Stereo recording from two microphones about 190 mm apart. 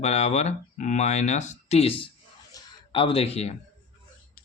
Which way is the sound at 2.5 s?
30° left (ahead or behind).